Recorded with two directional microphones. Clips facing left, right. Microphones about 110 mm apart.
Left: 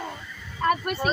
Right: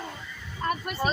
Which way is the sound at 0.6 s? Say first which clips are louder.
Left 6 dB; 65° left (ahead or behind).